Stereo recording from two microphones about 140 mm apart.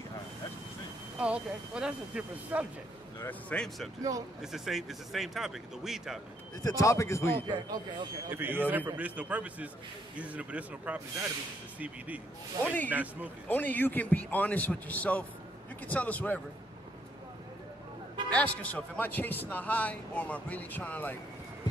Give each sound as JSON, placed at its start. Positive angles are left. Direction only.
{"t": 1.2, "sound": "a man's voice", "side_deg": -5}
{"t": 3.2, "sound": "a man's voice", "side_deg": 10}
{"t": 6.6, "sound": "a man's voice", "side_deg": 20}
{"t": 7.4, "sound": "speech", "side_deg": -30}
{"t": 8.3, "sound": "a man's voice", "side_deg": -15}
{"t": 12.6, "sound": "a man's voice", "side_deg": 10}
{"t": 12.9, "sound": "a man's voice", "side_deg": -10}
{"t": 13.5, "sound": "a man's voice", "side_deg": 10}
{"t": 18.3, "sound": "a man's voice", "side_deg": 10}